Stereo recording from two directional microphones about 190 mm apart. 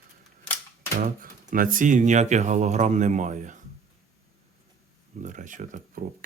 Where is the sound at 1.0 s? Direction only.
45° right (ahead or behind).